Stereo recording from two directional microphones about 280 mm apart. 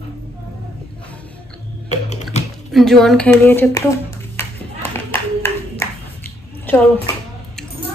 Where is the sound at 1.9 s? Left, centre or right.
Left.